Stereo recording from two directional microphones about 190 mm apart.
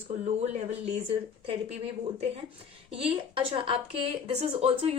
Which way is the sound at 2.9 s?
30° right (ahead or behind).